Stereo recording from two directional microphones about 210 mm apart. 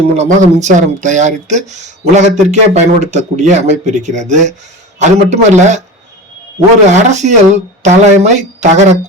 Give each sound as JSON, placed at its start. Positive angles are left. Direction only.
{"t": 0.2, "sound": "speech", "side_deg": -35}
{"t": 6.8, "sound": "speech", "side_deg": -35}